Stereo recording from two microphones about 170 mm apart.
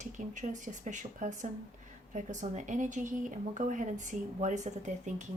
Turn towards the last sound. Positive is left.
turn(degrees=-45)  # may be behind; listen again after turning